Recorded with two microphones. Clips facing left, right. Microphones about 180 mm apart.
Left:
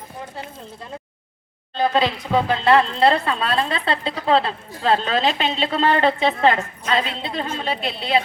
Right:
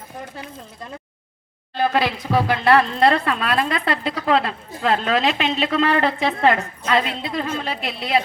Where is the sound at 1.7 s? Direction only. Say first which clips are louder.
Left 1 dB; 20° left (ahead or behind).